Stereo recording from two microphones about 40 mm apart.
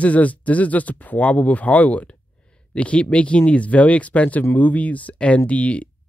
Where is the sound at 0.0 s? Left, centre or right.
Left.